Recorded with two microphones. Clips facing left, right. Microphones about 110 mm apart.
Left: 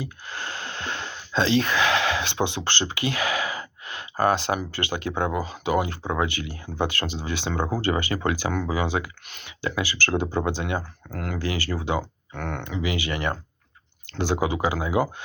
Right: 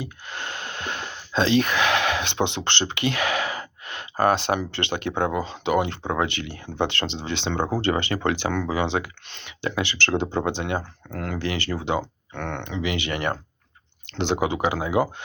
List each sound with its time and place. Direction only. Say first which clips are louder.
0.0 s a sound: even; 25° right (ahead or behind)
1.6 s speech: even; 20° right (ahead or behind)
12.5 s speech: even; 60° right (ahead or behind)
12.7 s speech: right 1 dB; 30° right (ahead or behind)